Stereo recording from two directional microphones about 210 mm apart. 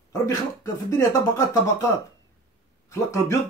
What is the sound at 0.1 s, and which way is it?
Speech, 15° left (ahead or behind).